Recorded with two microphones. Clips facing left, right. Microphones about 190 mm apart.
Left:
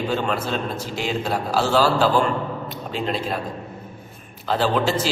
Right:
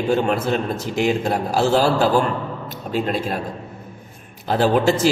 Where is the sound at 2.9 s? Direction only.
50° right (ahead or behind).